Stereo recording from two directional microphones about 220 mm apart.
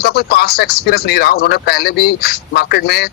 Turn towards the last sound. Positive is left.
turn(degrees=45)  # may be behind; listen again after turning